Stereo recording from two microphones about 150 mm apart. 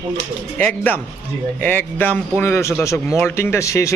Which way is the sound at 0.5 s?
10° left (ahead or behind).